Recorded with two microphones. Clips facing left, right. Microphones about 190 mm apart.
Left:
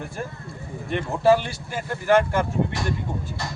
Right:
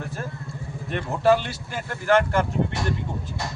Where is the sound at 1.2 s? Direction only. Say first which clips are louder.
Left 1 dB; 10° left (ahead or behind).